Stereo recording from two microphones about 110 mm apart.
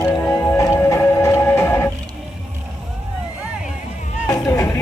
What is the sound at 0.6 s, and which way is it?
Music, 25° left (ahead or behind).